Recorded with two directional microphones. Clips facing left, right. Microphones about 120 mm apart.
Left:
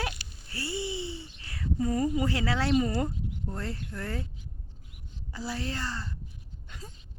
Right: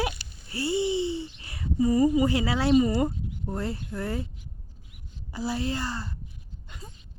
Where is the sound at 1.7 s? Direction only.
5° right (ahead or behind).